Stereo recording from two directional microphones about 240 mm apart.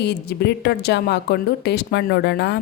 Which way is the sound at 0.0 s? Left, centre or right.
Left.